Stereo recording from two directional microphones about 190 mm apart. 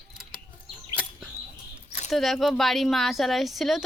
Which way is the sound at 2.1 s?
Centre (ahead or behind).